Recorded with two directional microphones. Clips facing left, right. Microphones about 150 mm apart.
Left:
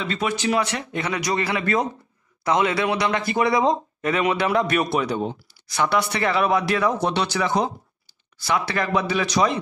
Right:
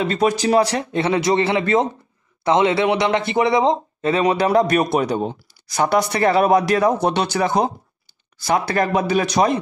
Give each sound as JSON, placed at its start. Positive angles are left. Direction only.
{"t": 0.0, "sound": "speech", "side_deg": -40}